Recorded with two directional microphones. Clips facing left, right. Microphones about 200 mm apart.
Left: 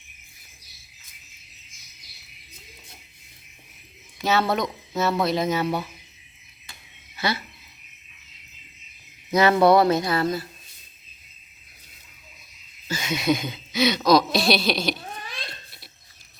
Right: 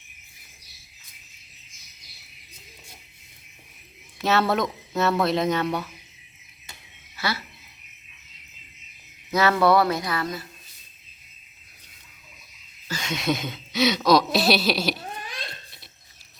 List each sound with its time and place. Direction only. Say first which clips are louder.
4.2 s speech: right 1 dB; centre (ahead or behind)
7.2 s speech: left 2 dB; 20° left (ahead or behind)
9.3 s speech: left 3 dB; 20° left (ahead or behind)
12.9 s speech: left 3 dB; 5° left (ahead or behind)